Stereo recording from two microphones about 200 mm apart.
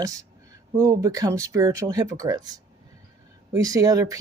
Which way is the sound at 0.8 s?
15° right (ahead or behind).